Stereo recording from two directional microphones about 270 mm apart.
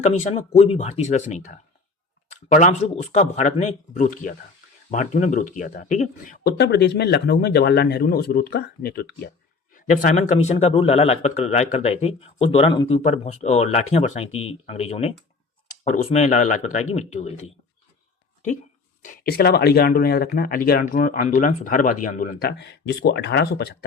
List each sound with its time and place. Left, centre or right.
0.0 s speech: left
19.0 s speech: left